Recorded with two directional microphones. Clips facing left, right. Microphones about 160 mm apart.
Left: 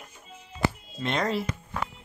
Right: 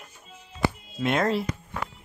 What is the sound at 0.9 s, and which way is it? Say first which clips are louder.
Speech: right 7 dB; 5° right (ahead or behind).